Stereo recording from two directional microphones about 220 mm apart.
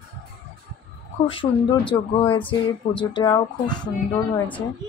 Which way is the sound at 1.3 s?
25° left (ahead or behind).